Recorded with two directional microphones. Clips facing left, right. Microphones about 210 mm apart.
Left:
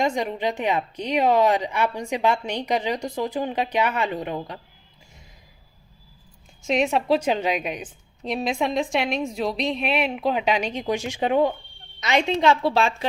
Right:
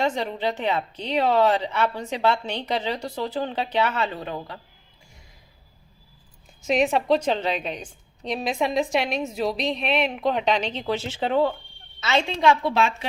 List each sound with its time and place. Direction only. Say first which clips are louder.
0.0 s a woman's voice: left 1 dB; 10° left (ahead or behind)
6.7 s a woman's voice: even; centre (ahead or behind); by 13.1 s 30° left (ahead or behind)